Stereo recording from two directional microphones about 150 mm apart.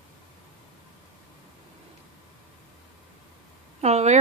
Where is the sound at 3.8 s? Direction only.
50° right (ahead or behind).